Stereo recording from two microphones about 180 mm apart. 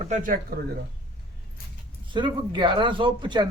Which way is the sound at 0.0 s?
45° right (ahead or behind).